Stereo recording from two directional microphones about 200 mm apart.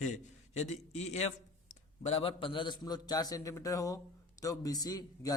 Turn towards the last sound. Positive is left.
turn(degrees=20)  # may be behind; listen again after turning